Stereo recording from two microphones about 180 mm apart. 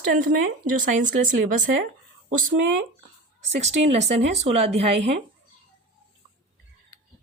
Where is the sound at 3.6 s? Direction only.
40° right (ahead or behind).